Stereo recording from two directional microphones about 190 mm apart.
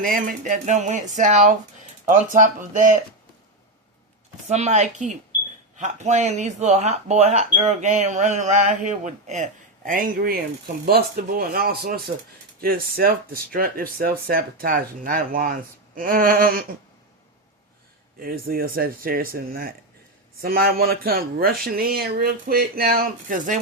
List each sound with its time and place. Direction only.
0.0 s speech: 45° right (ahead or behind)
4.4 s speech: 35° right (ahead or behind)
18.2 s speech: 50° right (ahead or behind)